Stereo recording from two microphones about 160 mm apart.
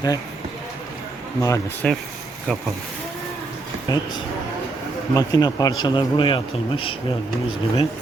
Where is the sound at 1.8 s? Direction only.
5° left (ahead or behind).